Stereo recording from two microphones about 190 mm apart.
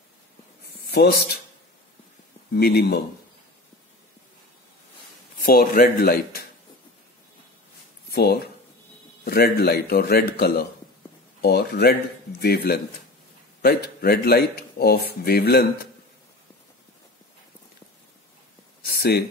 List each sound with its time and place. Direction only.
0.8 s speech: 55° left (ahead or behind)
2.5 s speech: 55° left (ahead or behind)
5.4 s speech: 50° left (ahead or behind)
8.1 s speech: 55° left (ahead or behind)
18.9 s a sound: 55° left (ahead or behind)